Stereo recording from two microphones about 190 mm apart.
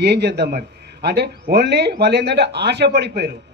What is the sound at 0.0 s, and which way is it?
Speech, 60° right (ahead or behind).